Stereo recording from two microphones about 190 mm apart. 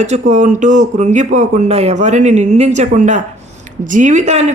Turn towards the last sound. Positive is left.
turn(degrees=-40)  # may be behind; listen again after turning